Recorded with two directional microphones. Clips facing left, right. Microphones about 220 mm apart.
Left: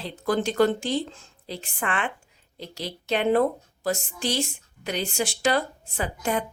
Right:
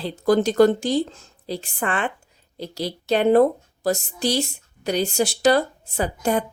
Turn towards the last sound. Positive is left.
turn(degrees=-40)  # may be behind; listen again after turning